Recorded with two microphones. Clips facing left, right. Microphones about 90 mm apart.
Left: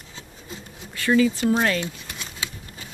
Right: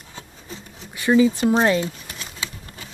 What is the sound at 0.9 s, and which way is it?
Speech, 20° right (ahead or behind).